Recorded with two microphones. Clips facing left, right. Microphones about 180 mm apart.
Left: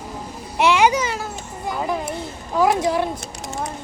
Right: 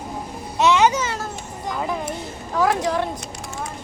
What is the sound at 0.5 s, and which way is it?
A child's voice, 10° left (ahead or behind).